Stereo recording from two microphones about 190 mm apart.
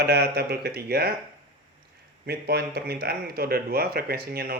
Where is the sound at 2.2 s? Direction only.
60° right (ahead or behind).